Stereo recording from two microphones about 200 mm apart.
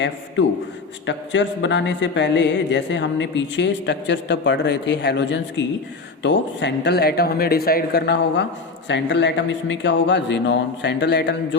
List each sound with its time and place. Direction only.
1.0 s speech: 65° left (ahead or behind)